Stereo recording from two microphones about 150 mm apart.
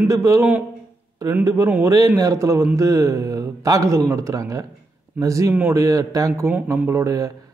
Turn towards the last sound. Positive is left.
turn(degrees=-20)  # may be behind; listen again after turning